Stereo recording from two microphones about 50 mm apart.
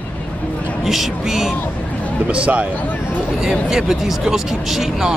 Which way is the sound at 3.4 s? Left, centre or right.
Centre.